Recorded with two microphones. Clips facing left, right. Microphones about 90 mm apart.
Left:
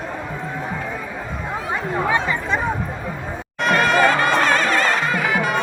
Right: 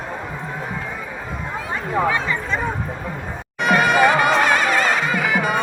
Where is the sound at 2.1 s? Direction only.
15° left (ahead or behind).